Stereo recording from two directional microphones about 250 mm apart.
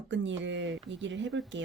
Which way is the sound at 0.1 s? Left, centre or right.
Right.